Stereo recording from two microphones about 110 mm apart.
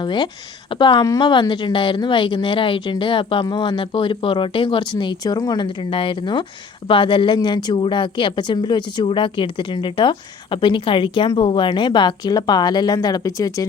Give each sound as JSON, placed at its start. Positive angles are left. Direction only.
{"t": 0.0, "sound": "a woman's voice", "side_deg": 45}